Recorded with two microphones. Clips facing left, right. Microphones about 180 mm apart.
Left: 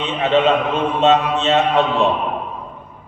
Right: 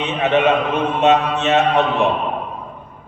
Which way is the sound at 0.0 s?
20° right (ahead or behind).